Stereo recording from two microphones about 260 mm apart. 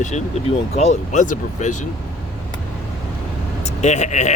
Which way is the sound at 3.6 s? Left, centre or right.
Left.